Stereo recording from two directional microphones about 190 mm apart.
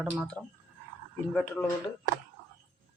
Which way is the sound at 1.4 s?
10° left (ahead or behind).